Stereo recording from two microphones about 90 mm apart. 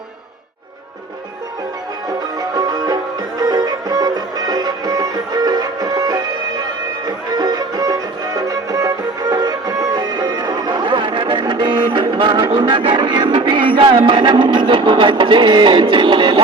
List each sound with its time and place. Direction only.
2.4 s music: 45° right (ahead or behind)
7.3 s music: 45° right (ahead or behind); by 16.4 s 65° right (ahead or behind)